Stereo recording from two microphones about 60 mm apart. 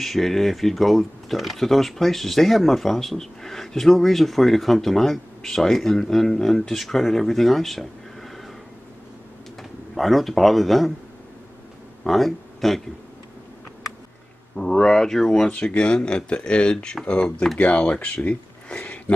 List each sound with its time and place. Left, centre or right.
0.0 s speech: centre
9.6 s speech: centre
12.0 s speech: centre
14.6 s speech: centre
16.7 s speech: centre
17.0 s speech: centre